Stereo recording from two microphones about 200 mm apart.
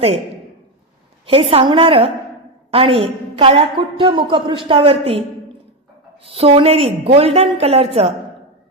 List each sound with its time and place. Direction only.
1.3 s a woman's voice: 30° right (ahead or behind)
6.3 s a woman's voice: 30° right (ahead or behind)